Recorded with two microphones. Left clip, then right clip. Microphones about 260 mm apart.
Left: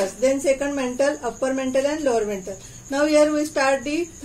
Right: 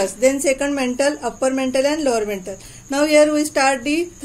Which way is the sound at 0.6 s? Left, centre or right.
Right.